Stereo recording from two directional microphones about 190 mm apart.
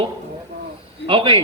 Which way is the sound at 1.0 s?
25° right (ahead or behind).